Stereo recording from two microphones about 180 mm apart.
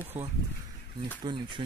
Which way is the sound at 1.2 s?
25° right (ahead or behind).